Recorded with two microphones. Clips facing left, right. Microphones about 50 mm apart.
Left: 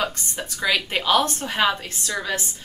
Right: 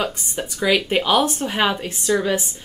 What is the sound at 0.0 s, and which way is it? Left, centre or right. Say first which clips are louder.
Speech: right 2 dB; centre.